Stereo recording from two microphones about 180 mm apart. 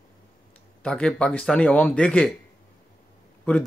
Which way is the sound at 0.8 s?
5° left (ahead or behind).